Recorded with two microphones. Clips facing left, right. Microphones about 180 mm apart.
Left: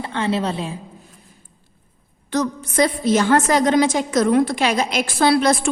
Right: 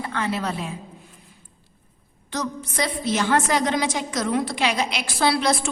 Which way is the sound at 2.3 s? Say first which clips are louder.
Left 7 dB; 50° left (ahead or behind).